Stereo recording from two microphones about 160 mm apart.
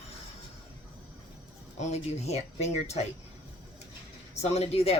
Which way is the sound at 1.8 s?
45° left (ahead or behind).